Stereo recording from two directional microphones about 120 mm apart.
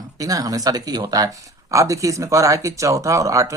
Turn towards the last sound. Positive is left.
turn(degrees=-30)  # may be behind; listen again after turning